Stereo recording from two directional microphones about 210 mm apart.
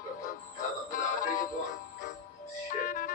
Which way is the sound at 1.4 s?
35° left (ahead or behind).